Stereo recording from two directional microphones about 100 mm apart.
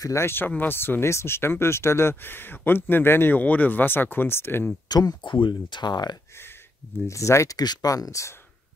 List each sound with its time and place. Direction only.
0.0 s speech: 30° left (ahead or behind)
4.8 s speech: 45° left (ahead or behind)
7.1 s speech: 30° left (ahead or behind)